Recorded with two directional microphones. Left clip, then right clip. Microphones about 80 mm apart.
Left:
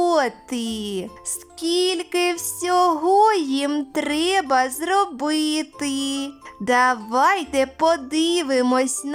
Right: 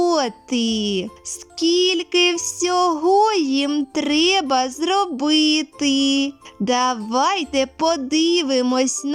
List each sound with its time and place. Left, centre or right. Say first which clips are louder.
0.0 s speech: even; right
9.1 s speech: right 2 dB; centre